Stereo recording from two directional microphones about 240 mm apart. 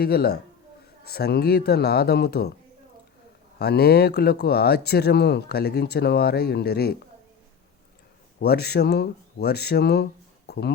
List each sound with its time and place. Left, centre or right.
0.0 s speech: left
3.6 s speech: left
8.4 s speech: left